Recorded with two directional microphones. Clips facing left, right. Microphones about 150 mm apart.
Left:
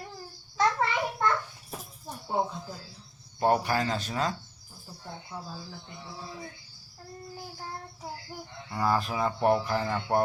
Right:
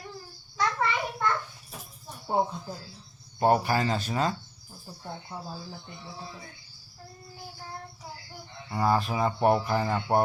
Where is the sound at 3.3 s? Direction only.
5° right (ahead or behind).